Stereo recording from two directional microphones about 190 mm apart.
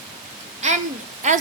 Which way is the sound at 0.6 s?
35° right (ahead or behind).